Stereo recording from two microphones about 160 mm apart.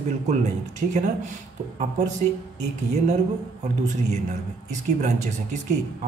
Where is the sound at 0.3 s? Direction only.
50° right (ahead or behind).